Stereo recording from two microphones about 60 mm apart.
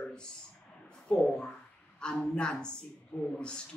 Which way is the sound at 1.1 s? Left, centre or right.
Centre.